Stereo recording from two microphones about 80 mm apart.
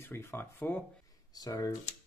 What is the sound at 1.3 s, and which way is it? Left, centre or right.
Speech, left.